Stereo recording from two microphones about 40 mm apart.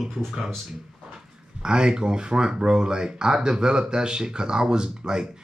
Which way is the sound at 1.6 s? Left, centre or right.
Right.